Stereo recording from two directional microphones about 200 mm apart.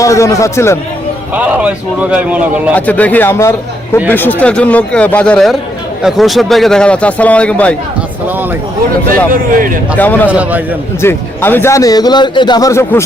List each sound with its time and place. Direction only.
0.0 s a man's voice: 15° left (ahead or behind)
1.3 s speech: 5° right (ahead or behind)
2.7 s a man's voice: 5° left (ahead or behind)
9.0 s speech: 45° right (ahead or behind)
10.0 s a man's voice: 10° left (ahead or behind)
10.2 s speech: 5° right (ahead or behind)
11.0 s a man's voice: 10° left (ahead or behind)